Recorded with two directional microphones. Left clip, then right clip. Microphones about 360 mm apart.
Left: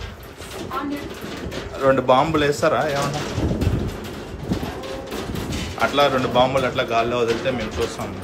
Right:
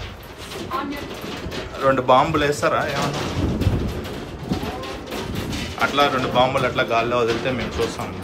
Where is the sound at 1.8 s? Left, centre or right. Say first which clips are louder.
Even; centre.